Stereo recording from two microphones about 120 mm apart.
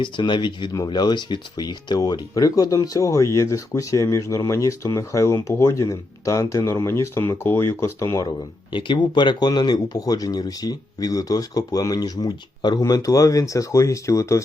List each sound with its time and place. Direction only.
0.0 s speech: 40° left (ahead or behind); by 8.3 s 25° left (ahead or behind)
8.7 s speech: 40° left (ahead or behind)